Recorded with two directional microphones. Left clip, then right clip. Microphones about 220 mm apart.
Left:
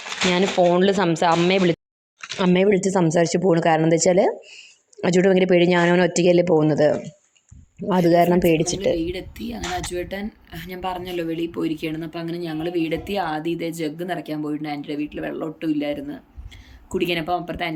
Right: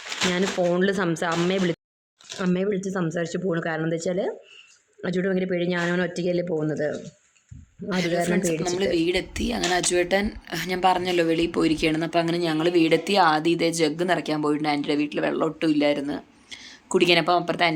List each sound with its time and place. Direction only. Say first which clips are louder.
0.2 s speech: left 5 dB; 10° left (ahead or behind)
2.4 s speech: left 8 dB; 20° left (ahead or behind)
7.9 s speech: left 8 dB; 5° left (ahead or behind)